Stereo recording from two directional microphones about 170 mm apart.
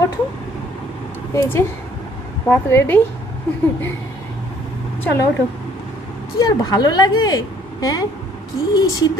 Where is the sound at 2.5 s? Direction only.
10° left (ahead or behind).